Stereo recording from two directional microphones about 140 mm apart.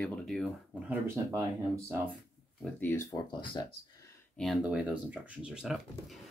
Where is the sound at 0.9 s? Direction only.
15° right (ahead or behind).